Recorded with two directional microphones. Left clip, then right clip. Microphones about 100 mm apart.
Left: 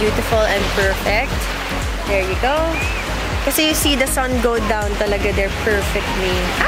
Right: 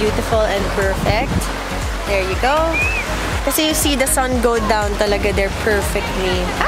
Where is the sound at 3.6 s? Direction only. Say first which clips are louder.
Left 1 dB; 15° right (ahead or behind).